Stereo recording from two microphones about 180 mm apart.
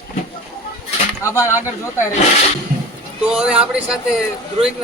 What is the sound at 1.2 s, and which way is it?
Speech, 15° left (ahead or behind).